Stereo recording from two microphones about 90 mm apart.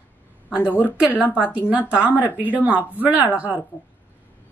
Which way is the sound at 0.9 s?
15° right (ahead or behind).